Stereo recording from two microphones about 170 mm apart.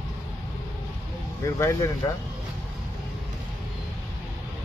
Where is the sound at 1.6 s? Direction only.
20° left (ahead or behind).